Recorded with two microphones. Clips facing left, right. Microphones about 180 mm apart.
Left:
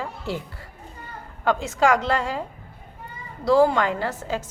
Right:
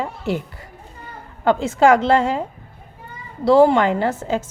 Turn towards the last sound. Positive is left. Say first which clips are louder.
# right 6 dB
turn(degrees=-25)  # may be behind; listen again after turning